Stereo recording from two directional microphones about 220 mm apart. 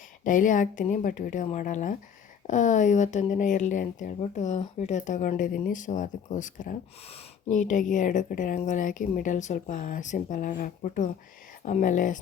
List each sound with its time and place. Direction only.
0.3 s speech: 35° left (ahead or behind)